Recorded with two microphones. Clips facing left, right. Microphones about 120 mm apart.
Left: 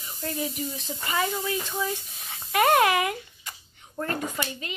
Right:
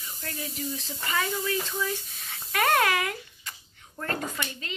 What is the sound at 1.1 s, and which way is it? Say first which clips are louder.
A woman's voice: left 1 dB; 20° left (ahead or behind).